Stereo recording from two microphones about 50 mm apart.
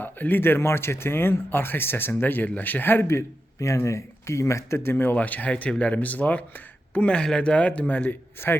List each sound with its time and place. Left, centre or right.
0.0 s speech: left
3.1 s a man's voice: left
5.1 s speech: left
7.9 s speech: left
8.4 s speech: left